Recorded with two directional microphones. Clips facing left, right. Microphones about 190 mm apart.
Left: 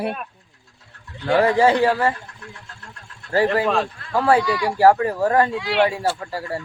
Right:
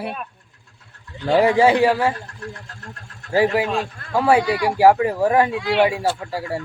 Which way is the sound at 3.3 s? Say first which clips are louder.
Even; 10° right (ahead or behind).